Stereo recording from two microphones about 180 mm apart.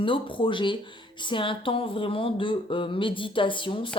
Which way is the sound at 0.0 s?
30° left (ahead or behind).